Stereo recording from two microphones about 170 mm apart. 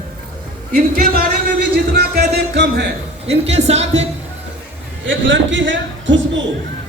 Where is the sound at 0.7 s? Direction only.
60° right (ahead or behind); by 2.9 s 80° right.